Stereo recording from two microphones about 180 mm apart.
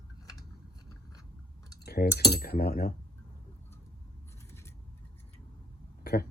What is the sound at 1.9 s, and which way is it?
Speech, 60° left (ahead or behind).